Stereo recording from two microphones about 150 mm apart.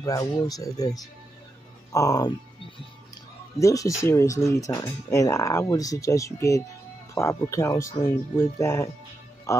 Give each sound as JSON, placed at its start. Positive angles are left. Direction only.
{"t": 0.0, "sound": "speech", "side_deg": 25}
{"t": 3.5, "sound": "speech", "side_deg": 20}